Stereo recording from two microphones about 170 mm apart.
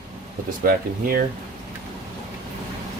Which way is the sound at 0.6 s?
60° right (ahead or behind).